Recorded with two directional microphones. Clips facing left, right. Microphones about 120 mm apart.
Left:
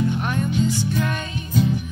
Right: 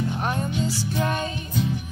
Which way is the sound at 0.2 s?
35° right (ahead or behind).